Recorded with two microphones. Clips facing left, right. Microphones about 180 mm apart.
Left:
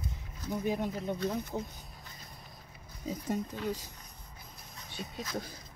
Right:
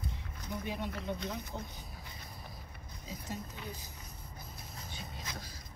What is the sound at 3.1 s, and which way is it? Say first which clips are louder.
Speech: left 9 dB; 55° left (ahead or behind).